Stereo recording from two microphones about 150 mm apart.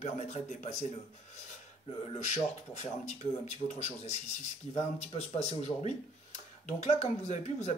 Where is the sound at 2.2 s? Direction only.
50° left (ahead or behind).